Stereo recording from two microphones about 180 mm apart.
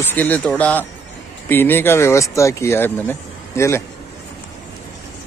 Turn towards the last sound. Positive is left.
turn(degrees=15)  # may be behind; listen again after turning